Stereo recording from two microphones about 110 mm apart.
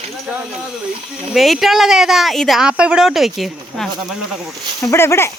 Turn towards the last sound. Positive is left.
turn(degrees=25)  # may be behind; listen again after turning